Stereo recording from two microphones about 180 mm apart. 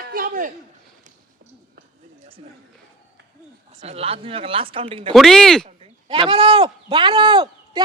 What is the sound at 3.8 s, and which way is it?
Speech, 35° right (ahead or behind).